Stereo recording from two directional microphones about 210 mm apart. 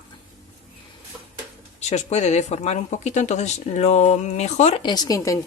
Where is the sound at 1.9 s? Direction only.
35° left (ahead or behind).